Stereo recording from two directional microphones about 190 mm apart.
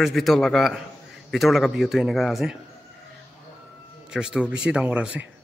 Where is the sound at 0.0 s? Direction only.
Centre (ahead or behind).